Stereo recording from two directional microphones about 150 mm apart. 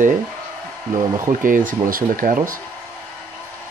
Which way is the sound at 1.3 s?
65° right (ahead or behind).